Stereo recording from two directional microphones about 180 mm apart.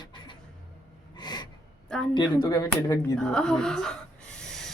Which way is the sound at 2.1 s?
25° left (ahead or behind).